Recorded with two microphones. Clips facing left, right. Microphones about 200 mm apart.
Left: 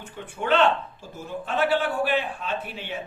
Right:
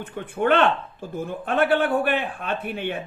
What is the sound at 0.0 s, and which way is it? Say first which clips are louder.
Speech: right 8 dB; 55° right (ahead or behind).